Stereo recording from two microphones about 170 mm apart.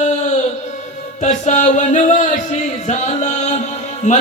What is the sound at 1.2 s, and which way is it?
Music, 45° left (ahead or behind).